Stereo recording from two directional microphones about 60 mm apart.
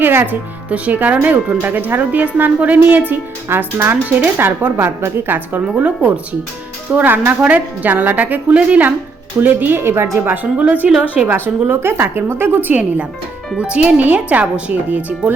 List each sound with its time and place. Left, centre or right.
0.0 s speech: right
5.8 s speech: right
10.6 s speech: right
11.2 s speech: centre
11.7 s speech: right
13.6 s speech: centre